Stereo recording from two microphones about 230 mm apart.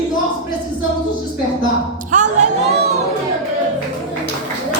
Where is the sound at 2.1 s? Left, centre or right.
Right.